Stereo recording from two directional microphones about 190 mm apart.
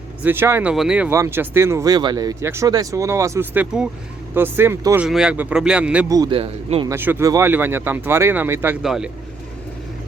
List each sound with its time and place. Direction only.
0.2 s speech: 10° right (ahead or behind)
5.0 s speech: 5° right (ahead or behind)
6.1 s speech: 20° right (ahead or behind)
6.8 s speech: 10° right (ahead or behind)